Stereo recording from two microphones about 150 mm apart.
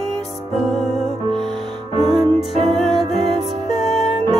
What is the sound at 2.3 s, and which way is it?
Music, centre (ahead or behind).